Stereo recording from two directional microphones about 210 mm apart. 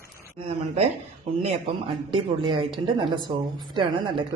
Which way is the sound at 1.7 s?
25° right (ahead or behind).